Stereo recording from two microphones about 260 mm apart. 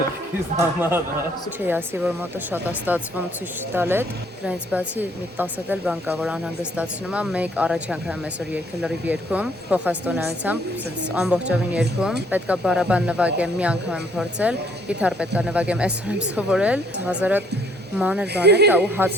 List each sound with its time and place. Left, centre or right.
0.8 s speech: centre
18.3 s speech: right
18.7 s speech: centre